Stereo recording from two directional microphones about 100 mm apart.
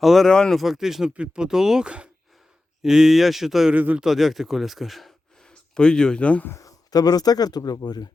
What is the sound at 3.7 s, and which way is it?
Speech, 15° right (ahead or behind).